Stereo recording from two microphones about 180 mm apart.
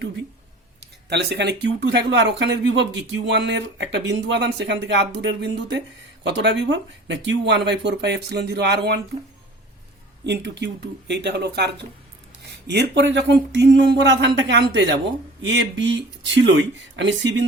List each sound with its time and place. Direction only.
1.1 s speech: 70° right (ahead or behind)
10.2 s speech: 70° right (ahead or behind); by 17.4 s 90° right